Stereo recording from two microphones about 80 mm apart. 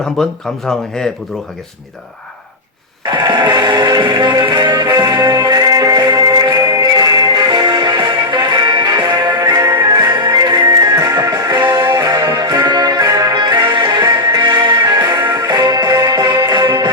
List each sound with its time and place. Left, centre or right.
0.0 s speech: centre
3.1 s music: right
13.3 s music: right